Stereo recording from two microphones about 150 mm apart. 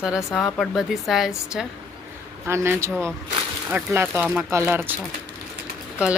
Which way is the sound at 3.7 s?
15° right (ahead or behind).